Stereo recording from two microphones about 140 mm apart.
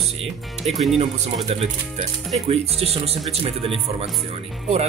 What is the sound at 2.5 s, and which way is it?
Speech, 45° right (ahead or behind).